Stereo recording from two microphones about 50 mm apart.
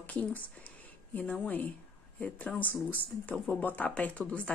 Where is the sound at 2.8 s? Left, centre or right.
Left.